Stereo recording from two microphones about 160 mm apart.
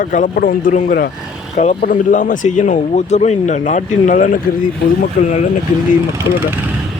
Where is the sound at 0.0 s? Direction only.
55° left (ahead or behind).